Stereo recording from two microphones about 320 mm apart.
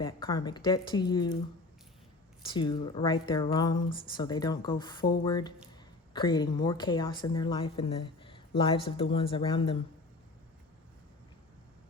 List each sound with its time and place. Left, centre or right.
0.0 s speech: centre
2.4 s speech: centre